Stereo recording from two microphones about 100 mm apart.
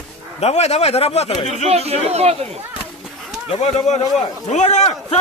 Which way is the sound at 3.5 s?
90° left.